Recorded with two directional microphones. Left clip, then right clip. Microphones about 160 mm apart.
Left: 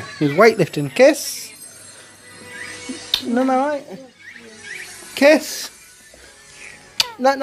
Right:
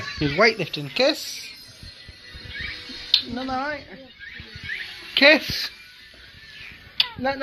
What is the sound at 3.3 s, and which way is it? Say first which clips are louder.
Speech: left 10 dB; 90° left.